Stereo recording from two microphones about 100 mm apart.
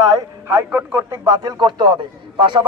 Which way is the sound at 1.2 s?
40° right (ahead or behind).